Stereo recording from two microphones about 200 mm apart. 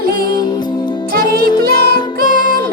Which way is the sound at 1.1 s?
50° right (ahead or behind).